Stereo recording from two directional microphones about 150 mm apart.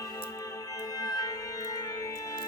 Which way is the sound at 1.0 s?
25° left (ahead or behind).